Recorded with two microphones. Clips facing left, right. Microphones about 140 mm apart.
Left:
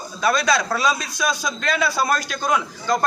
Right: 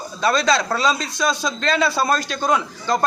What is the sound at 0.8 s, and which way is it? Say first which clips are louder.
Speech: right 2 dB; 25° right (ahead or behind).